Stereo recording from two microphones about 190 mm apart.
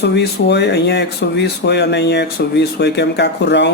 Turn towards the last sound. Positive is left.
turn(degrees=65)  # may be behind; listen again after turning